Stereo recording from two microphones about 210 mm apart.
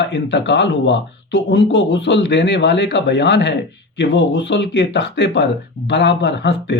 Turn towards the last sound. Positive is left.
turn(degrees=55)  # may be behind; listen again after turning